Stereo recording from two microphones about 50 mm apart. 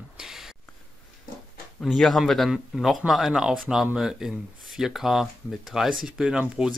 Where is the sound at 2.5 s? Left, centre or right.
Centre.